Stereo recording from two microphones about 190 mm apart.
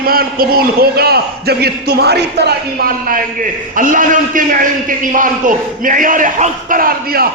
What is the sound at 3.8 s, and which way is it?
A man's voice, 45° right (ahead or behind).